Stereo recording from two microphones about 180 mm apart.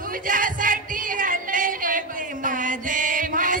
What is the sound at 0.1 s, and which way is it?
Music, 50° right (ahead or behind).